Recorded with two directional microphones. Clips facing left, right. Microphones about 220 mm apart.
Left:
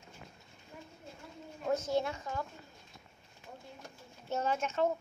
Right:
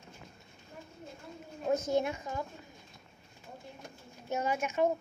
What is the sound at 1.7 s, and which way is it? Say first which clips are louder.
Speech: right 2 dB; 15° right (ahead or behind).